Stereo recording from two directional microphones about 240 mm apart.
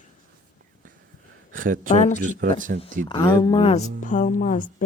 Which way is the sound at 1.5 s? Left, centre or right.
Right.